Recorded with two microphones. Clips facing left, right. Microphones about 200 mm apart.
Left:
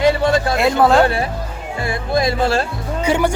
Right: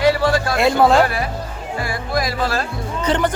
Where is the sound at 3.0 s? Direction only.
10° left (ahead or behind).